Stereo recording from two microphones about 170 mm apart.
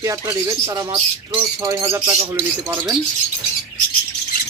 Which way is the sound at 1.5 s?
20° right (ahead or behind).